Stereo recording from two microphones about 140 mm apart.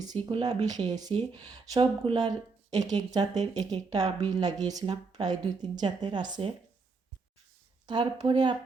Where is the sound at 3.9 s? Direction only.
50° right (ahead or behind).